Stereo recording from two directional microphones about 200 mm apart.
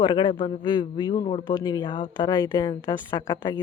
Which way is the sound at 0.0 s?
25° left (ahead or behind).